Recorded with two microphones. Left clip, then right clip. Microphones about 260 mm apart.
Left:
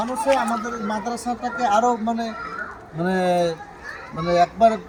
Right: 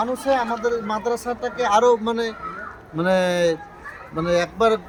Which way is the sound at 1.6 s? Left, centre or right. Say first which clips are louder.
Right 3 dB; centre.